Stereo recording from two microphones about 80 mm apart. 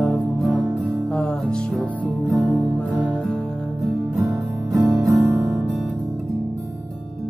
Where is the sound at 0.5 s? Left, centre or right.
Centre.